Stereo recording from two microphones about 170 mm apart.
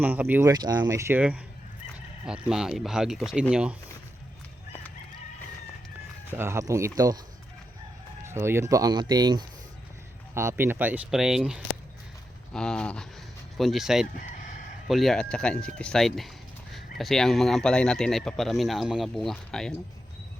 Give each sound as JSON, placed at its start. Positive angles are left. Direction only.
{"t": 0.0, "sound": "speech", "side_deg": -10}
{"t": 0.5, "sound": "speech", "side_deg": -25}
{"t": 6.3, "sound": "speech", "side_deg": -15}
{"t": 8.2, "sound": "speech", "side_deg": -15}